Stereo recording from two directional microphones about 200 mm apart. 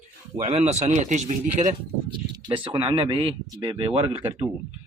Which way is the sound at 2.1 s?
20° right (ahead or behind).